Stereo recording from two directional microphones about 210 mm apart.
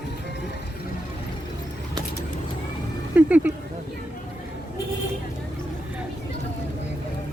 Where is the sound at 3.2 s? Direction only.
5° right (ahead or behind).